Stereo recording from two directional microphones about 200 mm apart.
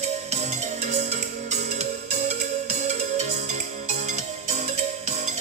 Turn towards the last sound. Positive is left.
turn(degrees=-35)  # may be behind; listen again after turning